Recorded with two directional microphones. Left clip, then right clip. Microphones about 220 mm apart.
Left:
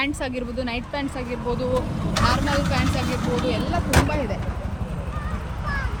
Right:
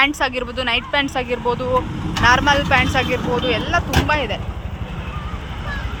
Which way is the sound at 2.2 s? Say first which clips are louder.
Right 10 dB; 30° right (ahead or behind).